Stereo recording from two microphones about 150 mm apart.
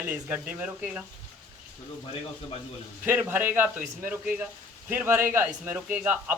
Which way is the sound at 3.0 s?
10° right (ahead or behind).